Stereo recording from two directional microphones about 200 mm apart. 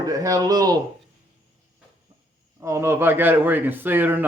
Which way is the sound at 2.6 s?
15° right (ahead or behind).